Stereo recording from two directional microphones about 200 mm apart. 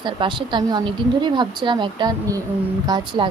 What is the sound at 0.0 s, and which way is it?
A woman's voice, 25° right (ahead or behind).